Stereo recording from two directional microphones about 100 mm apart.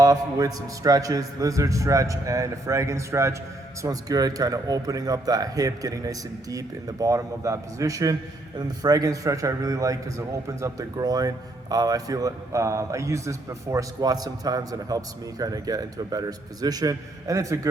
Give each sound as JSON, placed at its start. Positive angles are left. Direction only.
{"t": 0.0, "sound": "a man's voice", "side_deg": -35}